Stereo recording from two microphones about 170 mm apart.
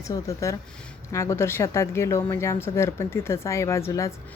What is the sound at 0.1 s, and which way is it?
A woman's voice, 20° left (ahead or behind).